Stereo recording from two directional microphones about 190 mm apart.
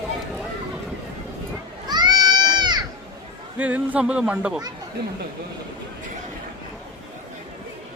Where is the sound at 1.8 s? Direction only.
20° right (ahead or behind).